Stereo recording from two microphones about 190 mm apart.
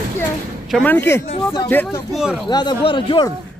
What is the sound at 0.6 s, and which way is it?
Speech, 5° left (ahead or behind).